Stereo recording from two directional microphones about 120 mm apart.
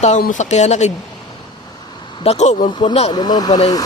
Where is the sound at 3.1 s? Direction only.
35° left (ahead or behind).